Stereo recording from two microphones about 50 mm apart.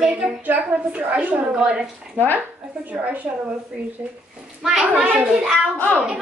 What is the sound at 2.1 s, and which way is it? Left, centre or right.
Speech, left.